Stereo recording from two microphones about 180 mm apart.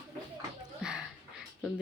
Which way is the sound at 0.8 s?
5° right (ahead or behind).